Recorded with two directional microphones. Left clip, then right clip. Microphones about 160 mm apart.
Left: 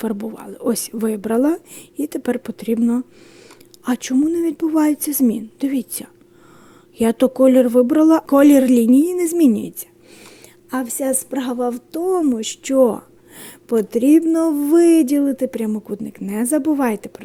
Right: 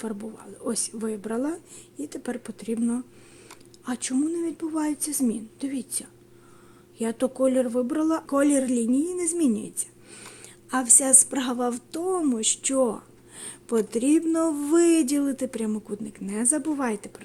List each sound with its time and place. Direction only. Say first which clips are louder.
0.0 s a woman's voice: left 9 dB; 45° left (ahead or behind)
10.7 s a woman's voice: left 1 dB; 25° left (ahead or behind)